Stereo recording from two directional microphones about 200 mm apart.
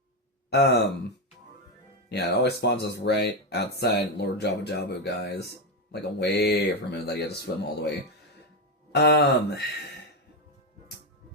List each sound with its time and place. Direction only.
0.5 s speech: 55° left (ahead or behind)
2.0 s speech: 55° left (ahead or behind)
8.9 s speech: 55° left (ahead or behind)